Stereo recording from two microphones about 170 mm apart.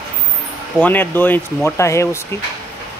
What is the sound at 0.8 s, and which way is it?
Speech, 10° left (ahead or behind).